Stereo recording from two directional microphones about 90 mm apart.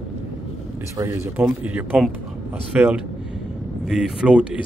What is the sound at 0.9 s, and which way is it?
Speech, 30° right (ahead or behind).